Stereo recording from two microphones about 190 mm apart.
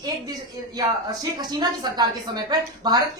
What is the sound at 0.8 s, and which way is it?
A woman's voice, 20° right (ahead or behind).